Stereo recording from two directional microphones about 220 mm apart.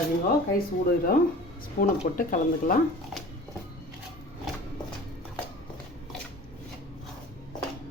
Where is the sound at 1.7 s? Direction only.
40° left (ahead or behind).